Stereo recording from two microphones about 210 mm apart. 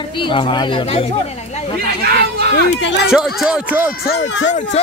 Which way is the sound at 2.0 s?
50° right (ahead or behind).